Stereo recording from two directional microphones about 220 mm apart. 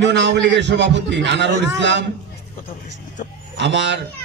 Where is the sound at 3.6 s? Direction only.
55° right (ahead or behind).